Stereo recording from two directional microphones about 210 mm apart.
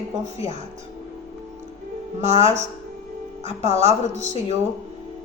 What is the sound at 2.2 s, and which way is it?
Speech, 30° right (ahead or behind).